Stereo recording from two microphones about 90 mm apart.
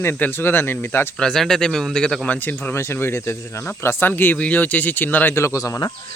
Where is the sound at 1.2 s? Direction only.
5° left (ahead or behind).